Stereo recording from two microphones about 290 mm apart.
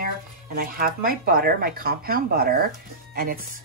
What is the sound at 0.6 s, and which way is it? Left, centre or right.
Speech, right.